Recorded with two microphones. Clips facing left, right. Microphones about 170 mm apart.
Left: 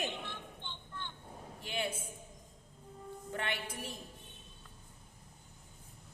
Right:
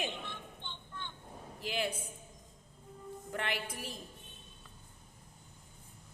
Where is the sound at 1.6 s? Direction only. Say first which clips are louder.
Right 2 dB; 25° left (ahead or behind).